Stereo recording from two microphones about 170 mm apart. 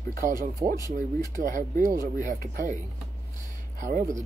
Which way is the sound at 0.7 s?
20° left (ahead or behind).